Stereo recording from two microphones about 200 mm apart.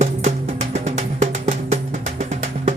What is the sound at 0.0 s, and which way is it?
Music, 35° right (ahead or behind).